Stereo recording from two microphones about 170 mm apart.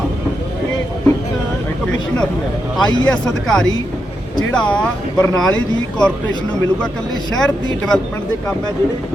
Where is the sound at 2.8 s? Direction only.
25° left (ahead or behind).